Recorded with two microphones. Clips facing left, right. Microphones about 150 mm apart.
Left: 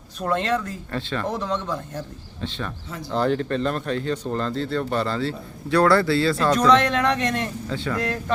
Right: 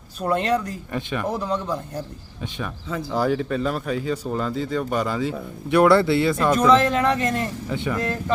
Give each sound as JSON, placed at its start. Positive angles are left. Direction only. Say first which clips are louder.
{"t": 0.2, "sound": "speech", "louder": "right 2 dB", "side_deg": -10}
{"t": 6.5, "sound": "speech", "louder": "right 1 dB", "side_deg": -5}
{"t": 7.7, "sound": "speech", "louder": "right 2 dB", "side_deg": -15}
{"t": 7.9, "sound": "speech", "louder": "even", "side_deg": 0}